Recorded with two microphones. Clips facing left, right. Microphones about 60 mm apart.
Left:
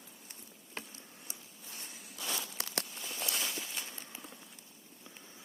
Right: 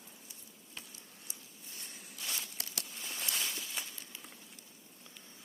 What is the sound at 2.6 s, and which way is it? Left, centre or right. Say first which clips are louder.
Walk: left 5 dB; left.